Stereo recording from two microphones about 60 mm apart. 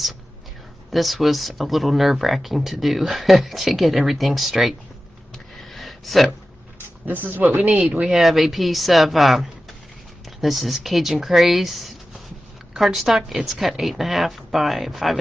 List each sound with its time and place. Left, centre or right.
0.9 s speech: centre
5.7 s a sound: centre
7.1 s speech: right
8.0 s speech: centre
10.4 s speech: centre